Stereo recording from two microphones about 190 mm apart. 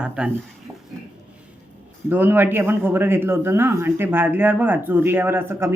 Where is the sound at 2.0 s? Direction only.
10° right (ahead or behind).